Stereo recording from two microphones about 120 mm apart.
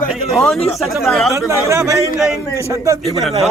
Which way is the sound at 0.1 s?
Centre (ahead or behind).